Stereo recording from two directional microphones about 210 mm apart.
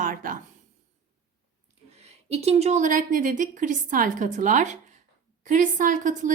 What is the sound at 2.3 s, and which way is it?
A woman's voice, 30° right (ahead or behind).